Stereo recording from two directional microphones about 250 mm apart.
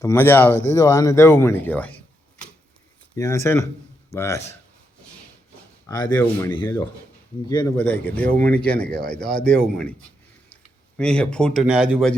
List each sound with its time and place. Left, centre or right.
0.0 s speech: centre
3.2 s speech: centre
5.8 s speech: centre